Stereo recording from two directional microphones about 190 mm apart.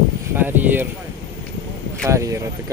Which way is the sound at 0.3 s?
10° right (ahead or behind).